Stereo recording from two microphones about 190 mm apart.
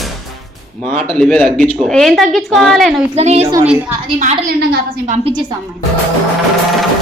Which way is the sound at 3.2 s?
35° right (ahead or behind).